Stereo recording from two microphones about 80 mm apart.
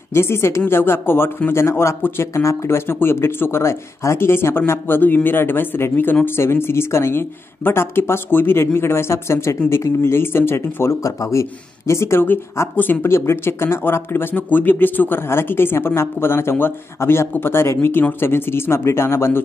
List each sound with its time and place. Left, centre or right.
0.1 s speech: left